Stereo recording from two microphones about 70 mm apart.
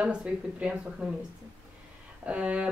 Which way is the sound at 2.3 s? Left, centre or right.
Centre.